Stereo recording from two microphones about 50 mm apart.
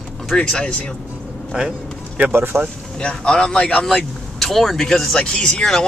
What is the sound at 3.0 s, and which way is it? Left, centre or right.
Speech, centre.